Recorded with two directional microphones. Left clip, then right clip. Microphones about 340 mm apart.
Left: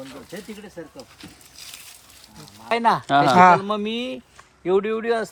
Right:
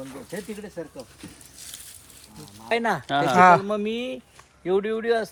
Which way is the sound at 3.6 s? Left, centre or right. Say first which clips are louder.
Left 1 dB; left.